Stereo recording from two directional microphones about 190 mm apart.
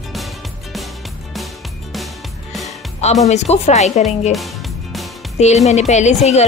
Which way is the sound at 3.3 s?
35° left (ahead or behind).